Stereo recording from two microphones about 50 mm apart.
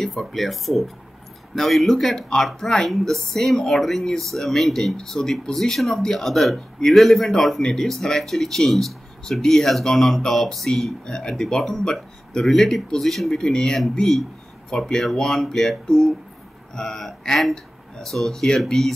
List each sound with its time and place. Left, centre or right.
0.2 s speech: centre